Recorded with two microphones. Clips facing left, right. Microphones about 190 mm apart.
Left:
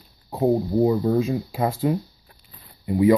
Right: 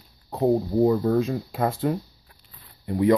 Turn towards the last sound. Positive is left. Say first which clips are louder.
# left 3 dB
turn(degrees=5)  # may be behind; listen again after turning